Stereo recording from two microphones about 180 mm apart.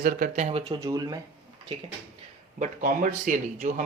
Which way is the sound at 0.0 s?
50° right (ahead or behind).